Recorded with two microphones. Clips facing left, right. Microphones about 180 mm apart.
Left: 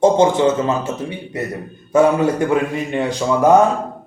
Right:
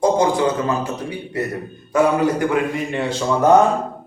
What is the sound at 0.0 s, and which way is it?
Speech, 25° left (ahead or behind).